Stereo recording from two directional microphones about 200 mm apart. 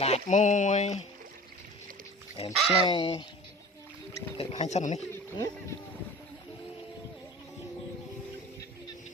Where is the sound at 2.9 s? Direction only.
25° left (ahead or behind).